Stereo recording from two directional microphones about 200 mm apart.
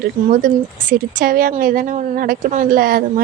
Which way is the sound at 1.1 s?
45° right (ahead or behind).